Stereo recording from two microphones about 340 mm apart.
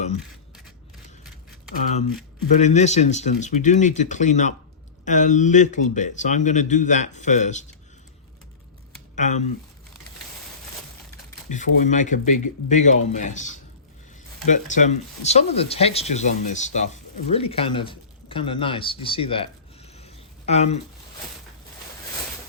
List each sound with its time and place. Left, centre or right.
2.6 s speech: centre
9.1 s speech: left
11.5 s speech: left
20.5 s speech: centre